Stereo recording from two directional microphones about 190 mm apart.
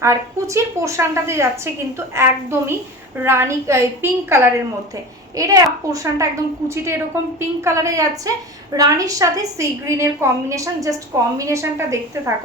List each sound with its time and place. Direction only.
0.0 s a woman's voice: 15° right (ahead or behind)